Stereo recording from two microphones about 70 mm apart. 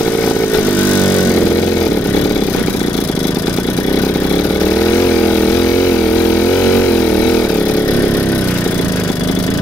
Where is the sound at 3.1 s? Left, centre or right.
Left.